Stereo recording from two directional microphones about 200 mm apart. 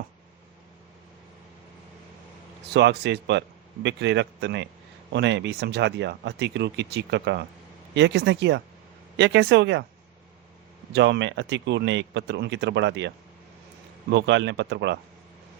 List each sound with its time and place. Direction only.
2.7 s speech: 60° right (ahead or behind)
10.9 s speech: 60° right (ahead or behind)